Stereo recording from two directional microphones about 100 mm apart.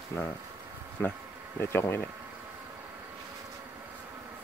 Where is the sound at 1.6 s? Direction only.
25° left (ahead or behind).